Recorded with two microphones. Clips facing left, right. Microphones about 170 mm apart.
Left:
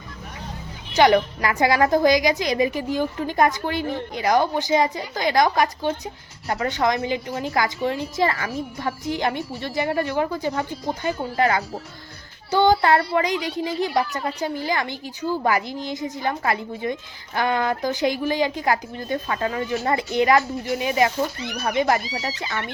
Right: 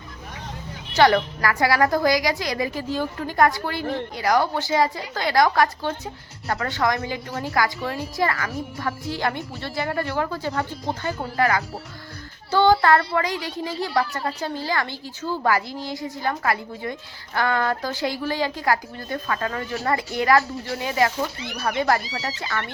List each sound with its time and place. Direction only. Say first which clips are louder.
0.9 s a child's voice: left 1 dB; 20° left (ahead or behind)